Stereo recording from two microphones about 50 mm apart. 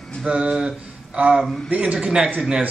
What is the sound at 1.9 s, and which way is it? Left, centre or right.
Mantra, centre.